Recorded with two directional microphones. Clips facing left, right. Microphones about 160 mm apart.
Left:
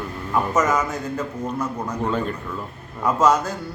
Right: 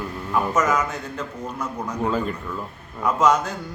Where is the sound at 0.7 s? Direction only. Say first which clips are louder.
Left 2 dB; 5° left (ahead or behind).